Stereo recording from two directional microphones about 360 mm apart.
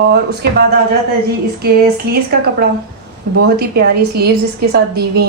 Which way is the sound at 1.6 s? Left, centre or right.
Right.